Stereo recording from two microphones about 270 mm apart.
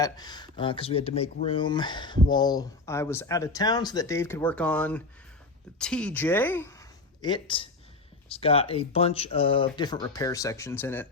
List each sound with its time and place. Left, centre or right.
0.0 s speech: centre